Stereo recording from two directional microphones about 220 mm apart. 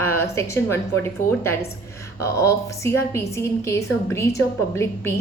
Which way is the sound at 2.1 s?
15° left (ahead or behind).